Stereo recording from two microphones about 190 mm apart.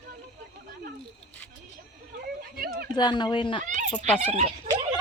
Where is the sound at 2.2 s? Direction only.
50° right (ahead or behind).